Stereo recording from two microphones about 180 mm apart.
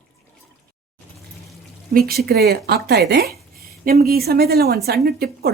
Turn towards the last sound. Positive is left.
turn(degrees=-60)  # may be behind; listen again after turning